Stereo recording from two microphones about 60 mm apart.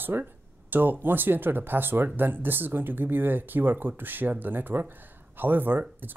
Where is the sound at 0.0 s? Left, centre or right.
Right.